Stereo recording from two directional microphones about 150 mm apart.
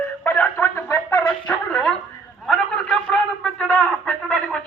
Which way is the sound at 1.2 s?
10° left (ahead or behind).